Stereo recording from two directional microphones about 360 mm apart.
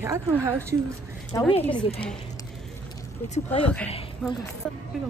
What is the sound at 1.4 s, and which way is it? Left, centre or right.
Speech, centre.